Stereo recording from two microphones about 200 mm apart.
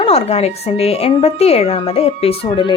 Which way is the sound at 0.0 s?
30° left (ahead or behind).